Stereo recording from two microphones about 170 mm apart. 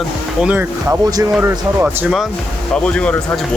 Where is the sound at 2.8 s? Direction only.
5° left (ahead or behind).